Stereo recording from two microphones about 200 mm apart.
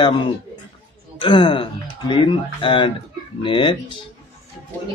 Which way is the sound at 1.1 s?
25° left (ahead or behind).